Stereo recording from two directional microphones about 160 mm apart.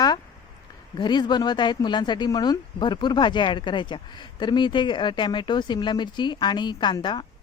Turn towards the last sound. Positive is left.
turn(degrees=30)  # may be behind; listen again after turning